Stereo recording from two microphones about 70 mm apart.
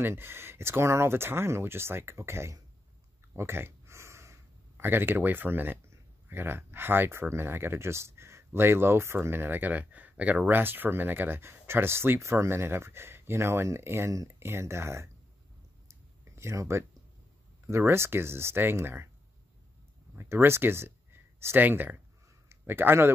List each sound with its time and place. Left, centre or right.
0.0 s speech: right
3.3 s a sound: right
6.2 s speech: right
16.3 s speech: right
20.2 s a man's voice: right